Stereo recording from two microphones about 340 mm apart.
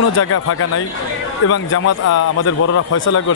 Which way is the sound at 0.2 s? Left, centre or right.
Left.